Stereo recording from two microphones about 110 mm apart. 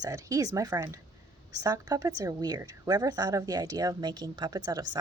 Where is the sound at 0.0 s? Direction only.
30° right (ahead or behind).